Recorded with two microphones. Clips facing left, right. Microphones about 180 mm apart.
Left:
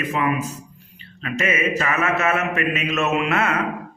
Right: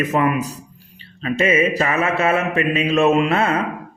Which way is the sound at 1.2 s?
30° right (ahead or behind).